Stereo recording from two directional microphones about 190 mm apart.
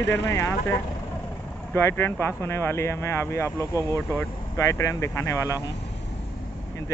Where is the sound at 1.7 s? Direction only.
15° left (ahead or behind).